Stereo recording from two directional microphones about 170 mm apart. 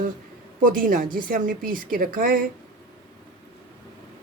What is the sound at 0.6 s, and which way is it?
Speech, 55° right (ahead or behind).